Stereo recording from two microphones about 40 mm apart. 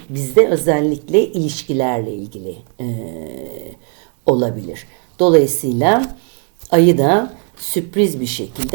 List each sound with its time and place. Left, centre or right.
0.0 s a woman's voice: centre
0.3 s speech: centre
4.3 s speech: centre
5.8 s speech: centre